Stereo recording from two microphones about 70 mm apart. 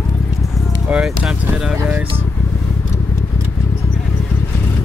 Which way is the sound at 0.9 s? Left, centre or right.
Centre.